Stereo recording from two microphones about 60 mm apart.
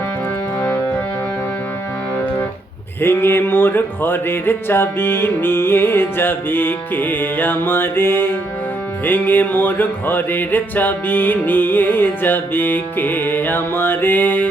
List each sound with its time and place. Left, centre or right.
3.0 s music: left